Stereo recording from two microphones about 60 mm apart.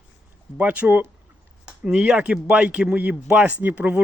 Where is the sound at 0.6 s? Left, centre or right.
Right.